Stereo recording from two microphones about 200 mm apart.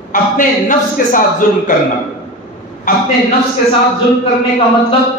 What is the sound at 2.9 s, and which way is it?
Speech, 45° left (ahead or behind).